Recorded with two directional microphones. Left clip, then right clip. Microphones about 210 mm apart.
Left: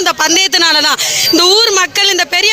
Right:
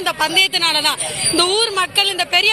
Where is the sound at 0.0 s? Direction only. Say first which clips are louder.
Left 5 dB; 40° left (ahead or behind).